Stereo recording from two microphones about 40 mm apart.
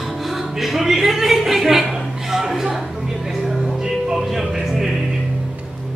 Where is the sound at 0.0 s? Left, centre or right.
Centre.